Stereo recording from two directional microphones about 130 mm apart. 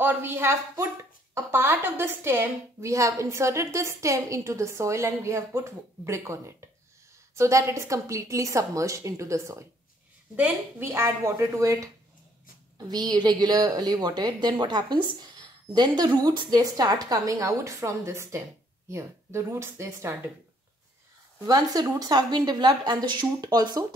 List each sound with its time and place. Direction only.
0.0 s a woman's voice: 15° right (ahead or behind)
21.5 s a woman's voice: 30° right (ahead or behind)